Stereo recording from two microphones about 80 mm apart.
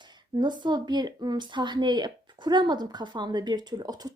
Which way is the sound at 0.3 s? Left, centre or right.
Right.